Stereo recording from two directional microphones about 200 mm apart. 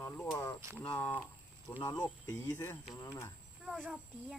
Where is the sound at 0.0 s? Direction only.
15° left (ahead or behind).